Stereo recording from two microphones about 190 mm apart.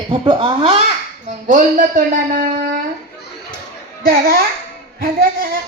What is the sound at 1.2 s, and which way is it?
Speech, 45° right (ahead or behind).